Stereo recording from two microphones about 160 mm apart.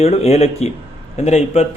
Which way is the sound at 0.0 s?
40° left (ahead or behind).